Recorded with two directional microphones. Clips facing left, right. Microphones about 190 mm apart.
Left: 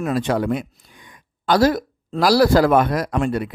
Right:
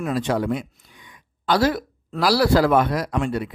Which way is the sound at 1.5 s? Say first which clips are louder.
Left 3 dB; 40° left (ahead or behind).